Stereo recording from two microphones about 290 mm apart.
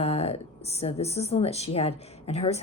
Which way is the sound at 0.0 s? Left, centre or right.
Left.